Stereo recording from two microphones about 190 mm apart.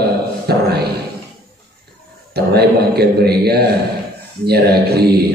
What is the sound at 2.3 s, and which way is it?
A man's voice, 55° right (ahead or behind).